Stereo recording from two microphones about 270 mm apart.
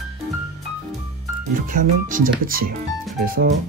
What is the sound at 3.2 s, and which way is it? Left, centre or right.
Music, right.